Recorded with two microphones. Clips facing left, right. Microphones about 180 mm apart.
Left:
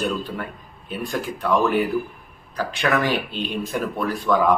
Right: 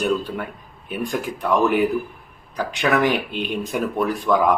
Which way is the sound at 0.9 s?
15° right (ahead or behind).